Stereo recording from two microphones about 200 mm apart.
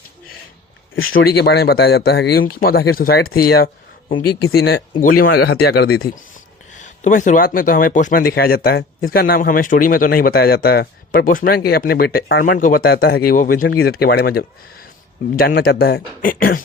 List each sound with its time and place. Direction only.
0.9 s speech: 50° left (ahead or behind)
4.5 s speech: 50° left (ahead or behind)
6.7 s speech: 40° left (ahead or behind)